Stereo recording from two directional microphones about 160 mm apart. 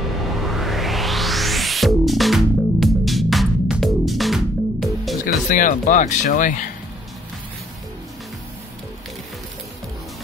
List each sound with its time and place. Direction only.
0.4 s music: centre (ahead or behind)
5.2 s speech: 55° left (ahead or behind)